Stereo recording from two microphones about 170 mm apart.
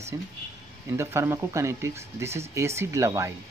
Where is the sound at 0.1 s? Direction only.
20° right (ahead or behind).